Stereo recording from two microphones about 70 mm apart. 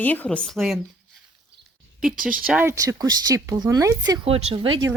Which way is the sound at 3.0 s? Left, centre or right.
Right.